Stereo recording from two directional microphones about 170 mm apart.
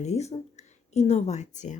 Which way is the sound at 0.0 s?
40° left (ahead or behind).